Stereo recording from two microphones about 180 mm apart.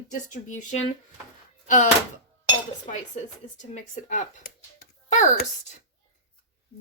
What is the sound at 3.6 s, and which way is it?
Speech, 45° left (ahead or behind).